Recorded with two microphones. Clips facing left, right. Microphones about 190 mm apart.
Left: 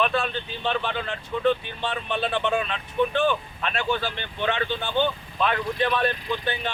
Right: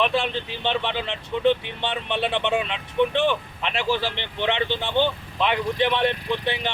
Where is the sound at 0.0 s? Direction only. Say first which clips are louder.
Right 2 dB; 25° right (ahead or behind).